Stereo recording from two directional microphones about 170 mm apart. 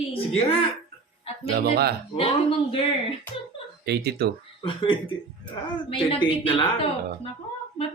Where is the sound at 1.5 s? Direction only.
65° right (ahead or behind).